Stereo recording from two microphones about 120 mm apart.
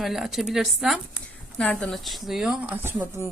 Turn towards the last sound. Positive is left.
turn(degrees=-15)  # may be behind; listen again after turning